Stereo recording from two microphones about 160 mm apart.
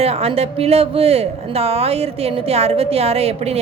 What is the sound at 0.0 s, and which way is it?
A woman's voice, 40° right (ahead or behind).